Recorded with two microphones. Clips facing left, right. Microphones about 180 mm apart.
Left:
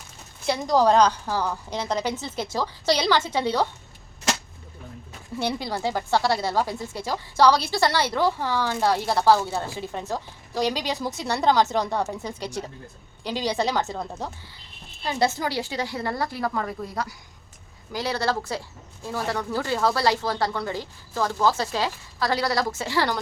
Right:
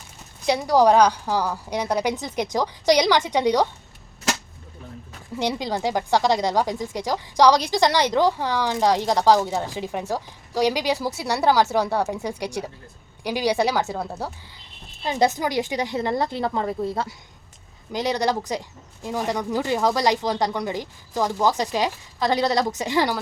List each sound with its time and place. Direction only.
0.4 s a woman's voice: 15° right (ahead or behind)
5.4 s a woman's voice: 15° right (ahead or behind)